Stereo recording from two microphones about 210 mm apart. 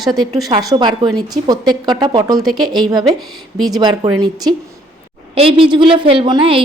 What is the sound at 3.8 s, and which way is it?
A woman's voice, 20° right (ahead or behind).